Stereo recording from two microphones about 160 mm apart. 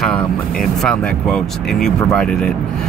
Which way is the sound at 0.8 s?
5° left (ahead or behind).